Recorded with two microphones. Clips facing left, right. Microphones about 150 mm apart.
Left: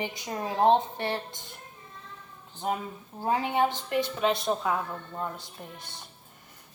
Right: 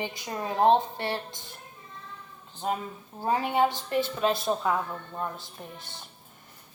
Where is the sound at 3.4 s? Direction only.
15° right (ahead or behind).